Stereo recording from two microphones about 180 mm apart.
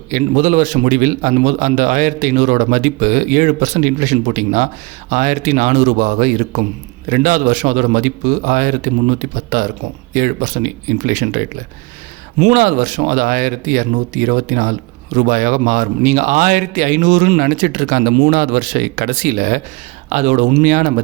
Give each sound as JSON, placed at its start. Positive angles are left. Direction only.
{"t": 0.1, "sound": "speech", "side_deg": -45}